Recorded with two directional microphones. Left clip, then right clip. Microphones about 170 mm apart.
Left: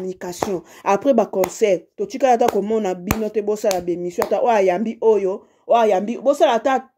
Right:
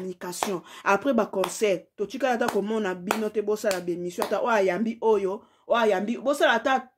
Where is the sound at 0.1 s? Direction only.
20° left (ahead or behind).